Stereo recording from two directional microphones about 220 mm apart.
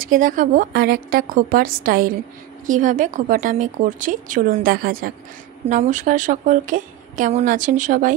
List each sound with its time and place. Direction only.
0.0 s a woman's voice: 40° right (ahead or behind)